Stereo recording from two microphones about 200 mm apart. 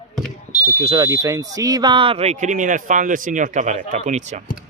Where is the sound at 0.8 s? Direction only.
30° right (ahead or behind).